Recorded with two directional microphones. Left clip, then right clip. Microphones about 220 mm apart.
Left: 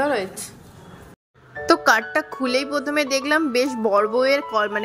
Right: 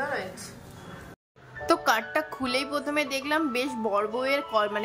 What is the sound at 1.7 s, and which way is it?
Speech, 20° left (ahead or behind).